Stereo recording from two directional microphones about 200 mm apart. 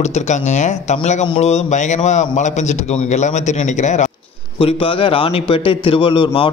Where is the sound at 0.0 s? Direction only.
35° left (ahead or behind).